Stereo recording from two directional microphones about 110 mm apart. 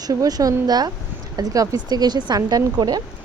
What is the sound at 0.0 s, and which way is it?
Speech, 35° right (ahead or behind).